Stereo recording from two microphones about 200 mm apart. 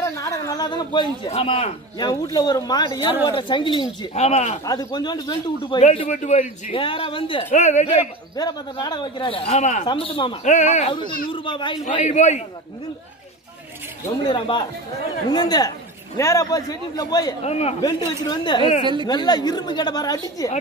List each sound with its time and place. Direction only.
0.0 s a sound: 15° left (ahead or behind)
1.2 s speech: 30° left (ahead or behind)
4.1 s a man's voice: 35° left (ahead or behind)
4.6 s speech: 20° left (ahead or behind)
5.9 s a man's voice: 35° left (ahead or behind)
8.4 s speech: 20° left (ahead or behind)
11.9 s a man's voice: 35° left (ahead or behind)
14.3 s speech: 25° left (ahead or behind)
17.4 s a man's voice: 30° left (ahead or behind)
17.7 s speech: 20° left (ahead or behind)